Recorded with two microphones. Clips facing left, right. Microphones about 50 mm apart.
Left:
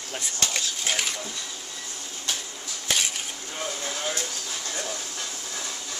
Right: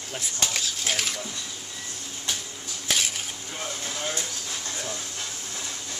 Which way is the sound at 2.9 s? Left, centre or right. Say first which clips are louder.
Even; centre.